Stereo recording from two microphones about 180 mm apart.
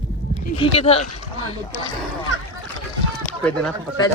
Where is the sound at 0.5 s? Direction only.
30° left (ahead or behind).